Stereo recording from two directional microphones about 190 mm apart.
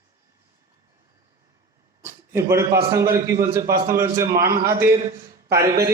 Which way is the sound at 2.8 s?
15° right (ahead or behind).